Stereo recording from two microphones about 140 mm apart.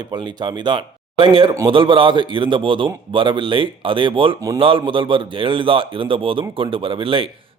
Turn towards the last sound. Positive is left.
turn(degrees=-40)  # may be behind; listen again after turning